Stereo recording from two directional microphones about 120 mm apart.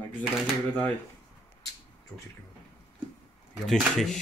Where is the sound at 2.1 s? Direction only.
25° left (ahead or behind).